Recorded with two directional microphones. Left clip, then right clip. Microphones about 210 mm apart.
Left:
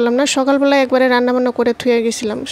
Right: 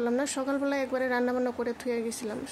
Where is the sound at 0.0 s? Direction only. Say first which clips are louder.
Left 15 dB; 35° left (ahead or behind).